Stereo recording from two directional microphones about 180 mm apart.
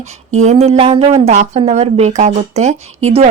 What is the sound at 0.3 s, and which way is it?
Speech, 40° right (ahead or behind).